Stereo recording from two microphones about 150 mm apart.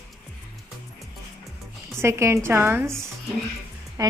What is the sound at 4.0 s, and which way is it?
Speech, 25° right (ahead or behind).